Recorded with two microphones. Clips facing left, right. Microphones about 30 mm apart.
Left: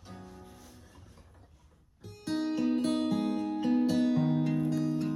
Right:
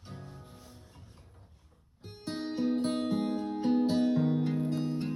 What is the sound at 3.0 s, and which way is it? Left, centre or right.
Music, centre.